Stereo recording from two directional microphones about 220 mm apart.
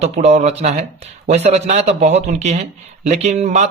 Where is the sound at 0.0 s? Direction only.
30° right (ahead or behind).